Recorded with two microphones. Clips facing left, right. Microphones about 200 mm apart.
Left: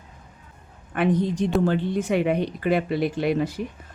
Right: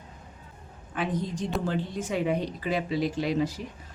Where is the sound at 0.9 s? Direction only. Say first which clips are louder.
Left 8 dB; 65° left (ahead or behind).